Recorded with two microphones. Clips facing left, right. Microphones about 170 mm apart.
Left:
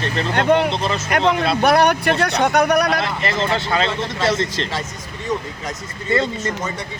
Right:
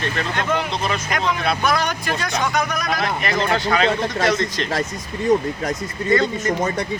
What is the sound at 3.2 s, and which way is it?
Speech, 25° left (ahead or behind).